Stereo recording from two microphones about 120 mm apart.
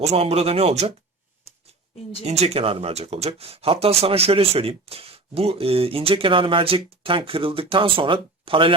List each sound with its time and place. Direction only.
0.0 s speech: 60° right (ahead or behind)
2.2 s speech: 60° right (ahead or behind); by 8.7 s 45° right (ahead or behind)